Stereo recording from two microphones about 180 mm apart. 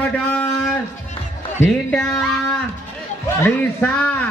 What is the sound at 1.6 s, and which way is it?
Speech, 5° left (ahead or behind).